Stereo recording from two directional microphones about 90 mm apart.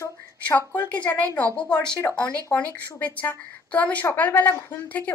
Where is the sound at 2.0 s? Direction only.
25° left (ahead or behind).